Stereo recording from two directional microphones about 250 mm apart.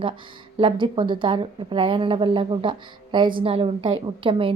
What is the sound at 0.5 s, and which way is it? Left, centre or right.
A woman's voice, centre.